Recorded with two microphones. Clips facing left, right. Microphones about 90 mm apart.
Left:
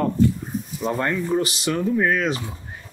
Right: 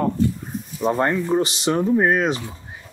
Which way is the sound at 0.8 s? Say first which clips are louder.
Right 4 dB; 30° right (ahead or behind).